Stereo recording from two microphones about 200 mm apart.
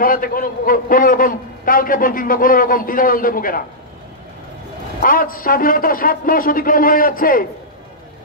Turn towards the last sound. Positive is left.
turn(degrees=45)  # may be behind; listen again after turning